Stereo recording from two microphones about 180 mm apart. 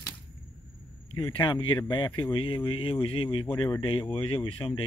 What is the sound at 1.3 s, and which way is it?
Speech, 25° left (ahead or behind).